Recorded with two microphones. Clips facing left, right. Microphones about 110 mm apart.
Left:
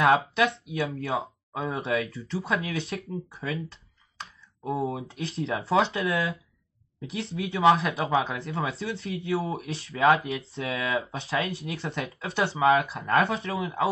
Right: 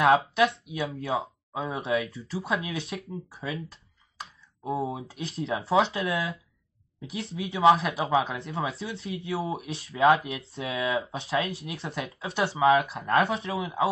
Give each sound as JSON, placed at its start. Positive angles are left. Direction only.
{"t": 0.0, "sound": "speech", "side_deg": 0}